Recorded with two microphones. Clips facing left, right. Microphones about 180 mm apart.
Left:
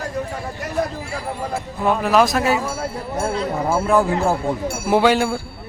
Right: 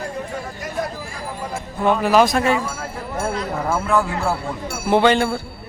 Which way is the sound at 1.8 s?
Centre (ahead or behind).